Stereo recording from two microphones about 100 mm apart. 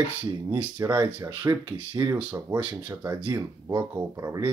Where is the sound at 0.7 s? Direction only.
40° right (ahead or behind).